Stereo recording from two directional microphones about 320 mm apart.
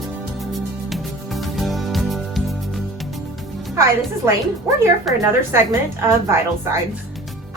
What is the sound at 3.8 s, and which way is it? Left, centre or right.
Speech, centre.